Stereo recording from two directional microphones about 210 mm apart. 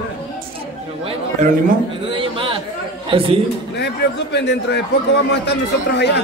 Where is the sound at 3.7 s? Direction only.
55° left (ahead or behind).